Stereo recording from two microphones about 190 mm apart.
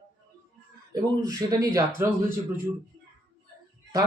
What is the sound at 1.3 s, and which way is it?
Speech, 20° right (ahead or behind).